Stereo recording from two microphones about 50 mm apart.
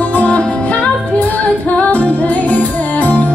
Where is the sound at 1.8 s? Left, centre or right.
Left.